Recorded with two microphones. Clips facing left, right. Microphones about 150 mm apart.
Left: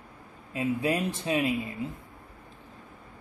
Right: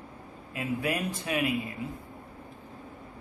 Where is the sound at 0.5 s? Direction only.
30° left (ahead or behind).